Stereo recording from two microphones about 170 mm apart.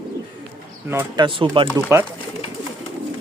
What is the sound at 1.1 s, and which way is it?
Speech, 30° right (ahead or behind).